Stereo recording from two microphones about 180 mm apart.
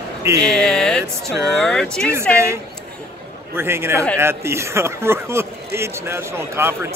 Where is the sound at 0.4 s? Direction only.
5° left (ahead or behind).